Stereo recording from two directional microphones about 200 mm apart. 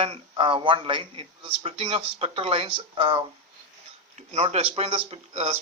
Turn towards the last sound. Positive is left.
turn(degrees=-30)  # may be behind; listen again after turning